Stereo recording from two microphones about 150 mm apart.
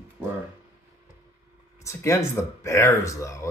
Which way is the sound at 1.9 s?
20° left (ahead or behind).